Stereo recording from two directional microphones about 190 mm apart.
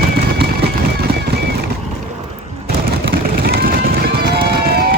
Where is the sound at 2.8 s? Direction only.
55° right (ahead or behind).